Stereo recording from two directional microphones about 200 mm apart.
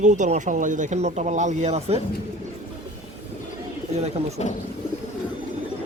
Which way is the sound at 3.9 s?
30° right (ahead or behind).